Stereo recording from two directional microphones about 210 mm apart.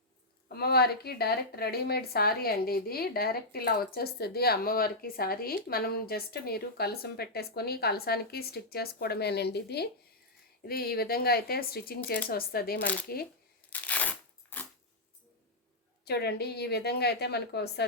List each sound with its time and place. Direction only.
0.4 s a woman's voice: 50° left (ahead or behind)
12.8 s speech: 5° left (ahead or behind)
13.7 s crunch: 5° left (ahead or behind)
16.0 s a woman's voice: 50° left (ahead or behind)